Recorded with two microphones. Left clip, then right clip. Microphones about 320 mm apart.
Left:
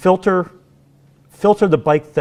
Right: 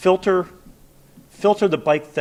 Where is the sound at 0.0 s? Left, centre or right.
Left.